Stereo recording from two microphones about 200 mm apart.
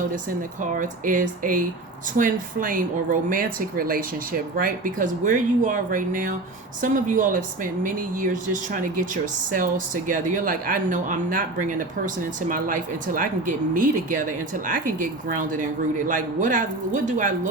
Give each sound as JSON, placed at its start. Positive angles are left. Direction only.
{"t": 0.6, "sound": "a woman's voice", "side_deg": -40}